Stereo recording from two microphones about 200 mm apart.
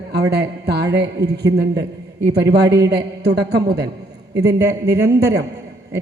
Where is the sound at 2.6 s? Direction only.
55° right (ahead or behind).